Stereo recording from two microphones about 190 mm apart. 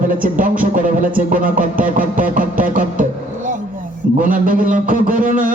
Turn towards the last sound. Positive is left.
turn(degrees=-45)  # may be behind; listen again after turning